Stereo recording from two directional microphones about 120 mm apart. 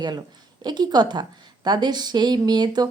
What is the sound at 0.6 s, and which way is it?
Speech, 35° right (ahead or behind).